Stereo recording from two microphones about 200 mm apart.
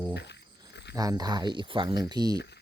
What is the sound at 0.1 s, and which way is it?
Insect, 60° left (ahead or behind).